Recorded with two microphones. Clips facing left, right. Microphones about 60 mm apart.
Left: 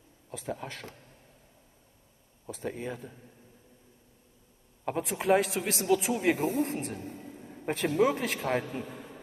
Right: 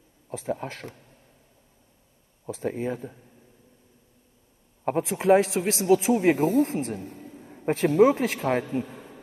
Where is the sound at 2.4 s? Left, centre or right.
Right.